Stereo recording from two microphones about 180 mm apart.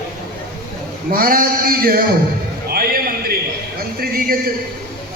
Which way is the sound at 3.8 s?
55° right (ahead or behind).